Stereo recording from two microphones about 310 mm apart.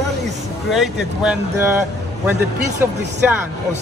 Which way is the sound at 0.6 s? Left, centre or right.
Centre.